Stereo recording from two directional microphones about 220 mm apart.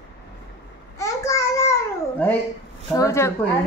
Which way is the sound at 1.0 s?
15° left (ahead or behind).